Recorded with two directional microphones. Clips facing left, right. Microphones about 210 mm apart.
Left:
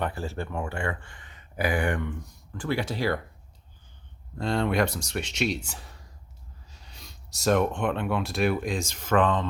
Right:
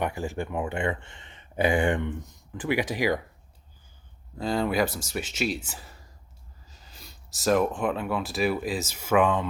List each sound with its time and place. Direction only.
0.0 s speech: 15° right (ahead or behind)
4.4 s speech: centre (ahead or behind)